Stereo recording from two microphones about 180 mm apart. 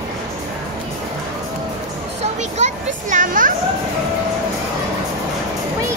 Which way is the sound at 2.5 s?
40° right (ahead or behind).